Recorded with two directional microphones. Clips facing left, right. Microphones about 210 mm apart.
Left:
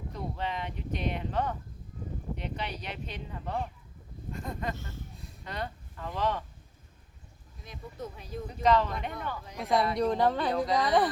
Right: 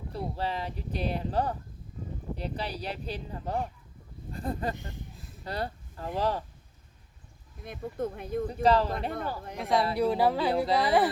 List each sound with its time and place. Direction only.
0.1 s speech: 35° right (ahead or behind)
4.3 s a sound: 35° right (ahead or behind)
4.7 s speech: 15° right (ahead or behind)
5.1 s a sound: centre (ahead or behind)
5.5 s speech: 35° right (ahead or behind)
7.6 s speech: 55° right (ahead or behind)
8.6 s speech: 35° right (ahead or behind)
9.6 s speech: centre (ahead or behind)